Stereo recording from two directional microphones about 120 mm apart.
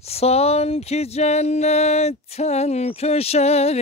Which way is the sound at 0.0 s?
60° left (ahead or behind).